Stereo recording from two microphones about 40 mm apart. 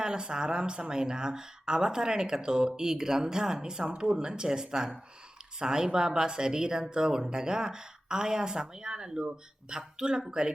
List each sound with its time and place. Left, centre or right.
0.0 s speech: centre